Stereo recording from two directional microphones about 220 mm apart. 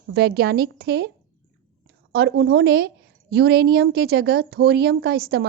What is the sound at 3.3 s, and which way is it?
Speech, 45° right (ahead or behind).